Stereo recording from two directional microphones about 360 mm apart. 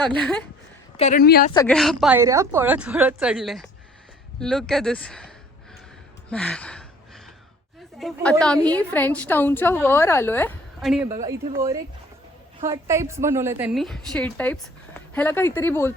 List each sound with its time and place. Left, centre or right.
0.0 s a woman's voice: centre
0.9 s a woman's voice: centre
1.5 s a woman's voice: centre
6.3 s a sound: centre
7.9 s a woman's voice: centre